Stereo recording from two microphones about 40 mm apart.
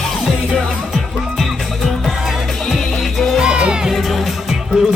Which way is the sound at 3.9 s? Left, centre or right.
Centre.